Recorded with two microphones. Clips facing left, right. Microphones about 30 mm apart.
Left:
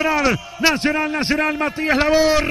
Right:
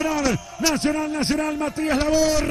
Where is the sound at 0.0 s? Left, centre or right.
Left.